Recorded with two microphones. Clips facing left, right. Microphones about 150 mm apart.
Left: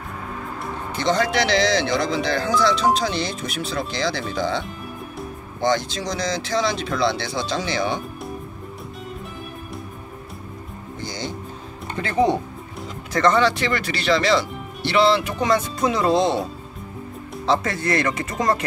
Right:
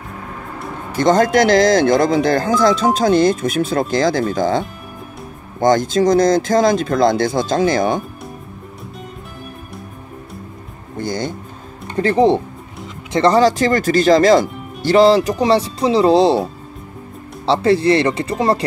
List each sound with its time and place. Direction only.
0.9 s speech: 45° right (ahead or behind)
11.0 s music: 50° right (ahead or behind)
12.0 s speech: 35° right (ahead or behind)
17.5 s speech: 30° right (ahead or behind)